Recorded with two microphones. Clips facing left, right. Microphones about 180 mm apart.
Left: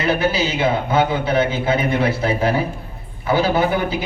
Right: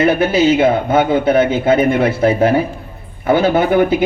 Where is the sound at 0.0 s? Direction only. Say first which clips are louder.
Right 7 dB; 55° right (ahead or behind).